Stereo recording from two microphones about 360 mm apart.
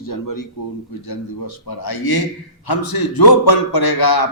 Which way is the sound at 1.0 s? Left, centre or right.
Left.